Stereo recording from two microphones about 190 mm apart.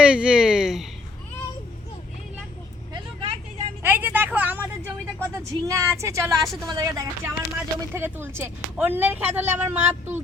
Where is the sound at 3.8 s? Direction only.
10° right (ahead or behind).